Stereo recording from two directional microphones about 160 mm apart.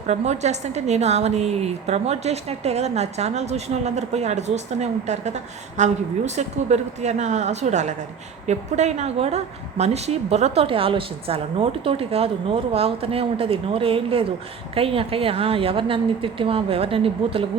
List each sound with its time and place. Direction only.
0.1 s a woman's voice: 45° right (ahead or behind)